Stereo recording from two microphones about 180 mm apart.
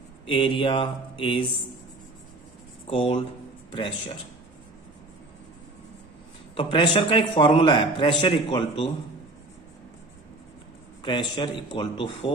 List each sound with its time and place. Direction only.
0.3 s a man's voice: 30° left (ahead or behind)
2.9 s a man's voice: 30° left (ahead or behind)
6.5 s a man's voice: 30° left (ahead or behind)
11.0 s a man's voice: 25° left (ahead or behind)